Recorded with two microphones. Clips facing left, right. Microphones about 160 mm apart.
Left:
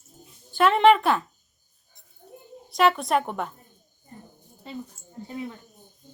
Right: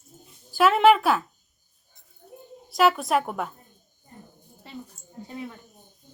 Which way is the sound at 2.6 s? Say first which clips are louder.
Even; centre (ahead or behind).